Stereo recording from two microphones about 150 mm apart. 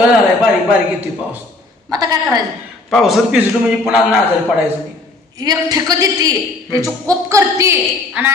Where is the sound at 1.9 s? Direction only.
25° right (ahead or behind).